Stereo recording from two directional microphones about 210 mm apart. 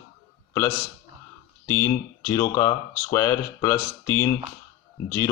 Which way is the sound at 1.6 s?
15° left (ahead or behind).